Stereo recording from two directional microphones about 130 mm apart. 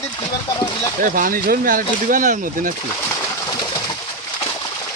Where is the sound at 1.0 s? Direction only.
90° right.